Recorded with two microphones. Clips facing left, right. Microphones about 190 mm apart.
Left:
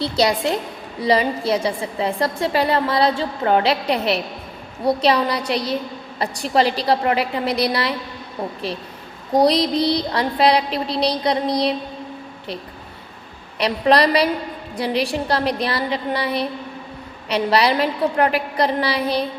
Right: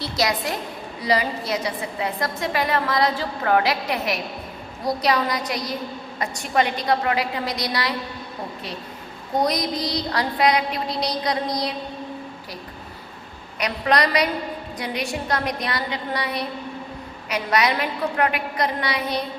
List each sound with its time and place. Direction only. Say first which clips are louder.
0.0 s a woman's voice: left 5 dB; 30° left (ahead or behind)
9.3 s a woman's voice: left 6 dB; 30° left (ahead or behind)
10.7 s a woman's voice: left 4 dB; 65° left (ahead or behind)
11.0 s a woman's voice: left 6 dB; 30° left (ahead or behind)
13.6 s a woman's voice: left 5 dB; 30° left (ahead or behind)